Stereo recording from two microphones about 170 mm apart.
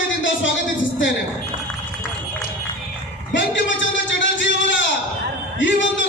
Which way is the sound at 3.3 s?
90° left.